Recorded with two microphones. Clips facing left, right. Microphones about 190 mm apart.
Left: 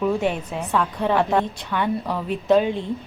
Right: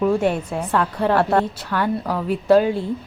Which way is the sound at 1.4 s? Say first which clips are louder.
Right 2 dB; 5° right (ahead or behind).